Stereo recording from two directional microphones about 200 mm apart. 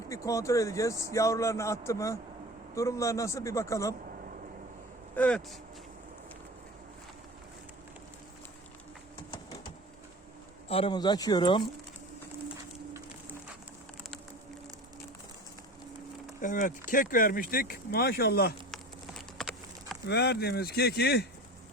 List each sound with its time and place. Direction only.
0.1 s a man's voice: 15° left (ahead or behind)
5.1 s a man's voice: 5° left (ahead or behind)
10.7 s speech: 25° left (ahead or behind)
16.4 s speech: 40° left (ahead or behind)
19.4 s clip-clop: centre (ahead or behind)
20.1 s speech: 55° left (ahead or behind)